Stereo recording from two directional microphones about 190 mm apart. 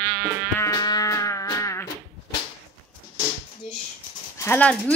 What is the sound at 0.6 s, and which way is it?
Insect, 15° left (ahead or behind).